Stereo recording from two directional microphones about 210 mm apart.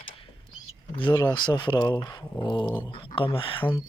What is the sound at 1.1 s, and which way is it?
Speech, 20° left (ahead or behind).